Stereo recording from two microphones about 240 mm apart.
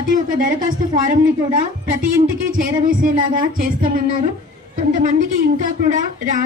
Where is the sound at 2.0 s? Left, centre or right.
Right.